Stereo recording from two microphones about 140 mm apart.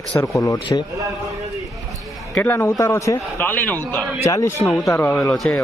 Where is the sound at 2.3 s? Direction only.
15° left (ahead or behind).